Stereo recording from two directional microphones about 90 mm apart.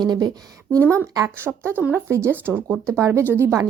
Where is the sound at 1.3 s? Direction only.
25° right (ahead or behind).